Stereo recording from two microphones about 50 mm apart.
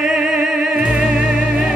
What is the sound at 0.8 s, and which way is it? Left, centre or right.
Music, centre.